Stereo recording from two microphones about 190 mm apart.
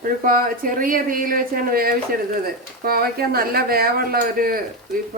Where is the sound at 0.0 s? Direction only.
45° right (ahead or behind).